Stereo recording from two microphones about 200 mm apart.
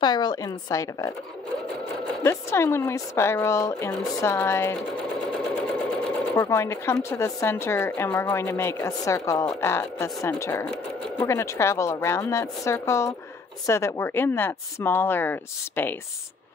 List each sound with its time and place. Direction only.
0.0 s a woman's voice: 20° left (ahead or behind)
2.2 s speech: 15° left (ahead or behind)
6.3 s speech: 15° left (ahead or behind)